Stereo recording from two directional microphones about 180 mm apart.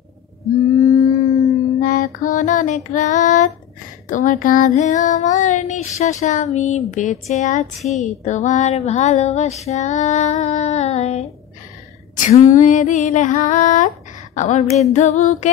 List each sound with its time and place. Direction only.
0.7 s a sound: 15° left (ahead or behind)
1.8 s female singing: 50° left (ahead or behind)
4.1 s child singing: 45° left (ahead or behind)
6.9 s female singing: 40° left (ahead or behind)
12.2 s child singing: 45° left (ahead or behind)
14.3 s female singing: 40° left (ahead or behind)
14.9 s child singing: 40° left (ahead or behind)